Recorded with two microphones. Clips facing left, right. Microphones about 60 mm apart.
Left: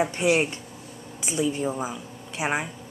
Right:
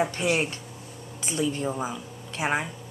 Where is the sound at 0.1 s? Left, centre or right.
Centre.